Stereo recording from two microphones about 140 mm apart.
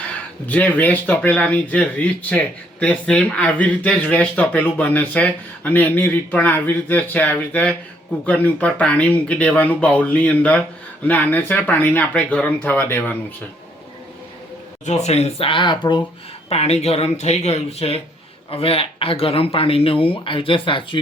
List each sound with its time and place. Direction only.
0.4 s speech: 10° left (ahead or behind)
14.8 s speech: 50° left (ahead or behind); by 16.0 s 35° left (ahead or behind)
16.5 s speech: 50° left (ahead or behind)